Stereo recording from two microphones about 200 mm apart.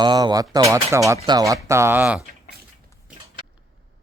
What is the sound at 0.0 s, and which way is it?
Speech, 20° right (ahead or behind).